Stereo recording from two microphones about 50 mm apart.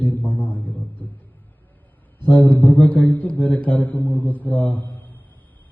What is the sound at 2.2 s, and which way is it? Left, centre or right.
A man's voice, left.